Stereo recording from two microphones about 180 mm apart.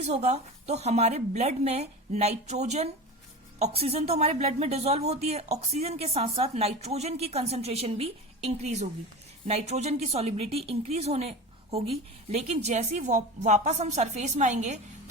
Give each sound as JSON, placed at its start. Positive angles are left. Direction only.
{"t": 0.0, "sound": "a woman's voice", "side_deg": -35}